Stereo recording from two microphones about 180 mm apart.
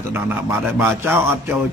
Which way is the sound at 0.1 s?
10° right (ahead or behind).